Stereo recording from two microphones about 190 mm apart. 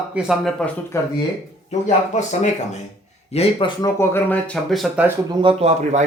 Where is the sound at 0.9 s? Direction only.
15° left (ahead or behind).